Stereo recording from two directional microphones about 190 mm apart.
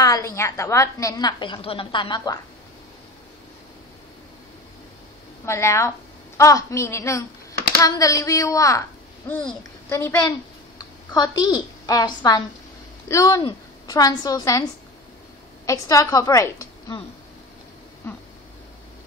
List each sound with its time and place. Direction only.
0.0 s a woman's voice: 15° left (ahead or behind)
5.4 s a woman's voice: 15° left (ahead or behind)
9.3 s a child's voice: 5° left (ahead or behind)
15.6 s a woman's voice: 15° left (ahead or behind)